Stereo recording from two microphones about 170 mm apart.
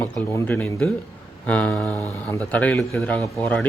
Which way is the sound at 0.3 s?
10° left (ahead or behind).